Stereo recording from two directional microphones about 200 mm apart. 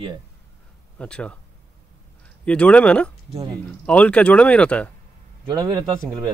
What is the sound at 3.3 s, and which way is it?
Speech, 25° right (ahead or behind).